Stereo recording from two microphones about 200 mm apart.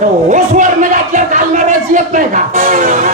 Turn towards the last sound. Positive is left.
turn(degrees=-40)  # may be behind; listen again after turning